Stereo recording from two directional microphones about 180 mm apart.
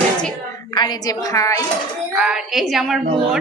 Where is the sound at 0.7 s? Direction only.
25° left (ahead or behind).